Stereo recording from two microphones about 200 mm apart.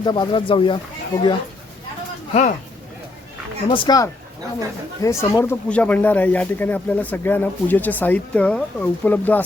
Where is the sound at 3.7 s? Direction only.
20° left (ahead or behind).